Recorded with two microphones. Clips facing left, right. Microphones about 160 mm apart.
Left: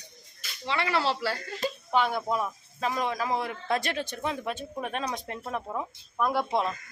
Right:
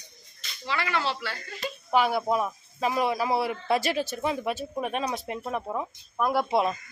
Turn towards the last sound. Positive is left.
turn(degrees=-10)  # may be behind; listen again after turning